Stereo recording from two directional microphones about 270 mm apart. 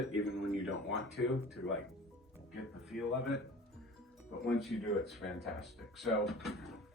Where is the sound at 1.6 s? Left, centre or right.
Left.